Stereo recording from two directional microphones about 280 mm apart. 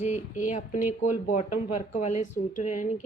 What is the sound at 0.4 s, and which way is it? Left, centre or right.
A woman's voice, left.